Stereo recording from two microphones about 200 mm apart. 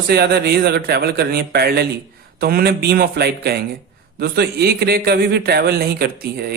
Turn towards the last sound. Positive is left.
turn(degrees=-50)  # may be behind; listen again after turning